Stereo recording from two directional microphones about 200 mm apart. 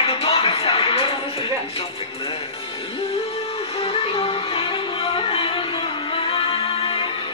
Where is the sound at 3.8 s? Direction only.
30° left (ahead or behind).